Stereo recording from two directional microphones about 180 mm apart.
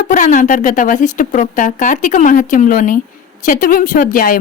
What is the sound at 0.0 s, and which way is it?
A woman's voice, 45° left (ahead or behind).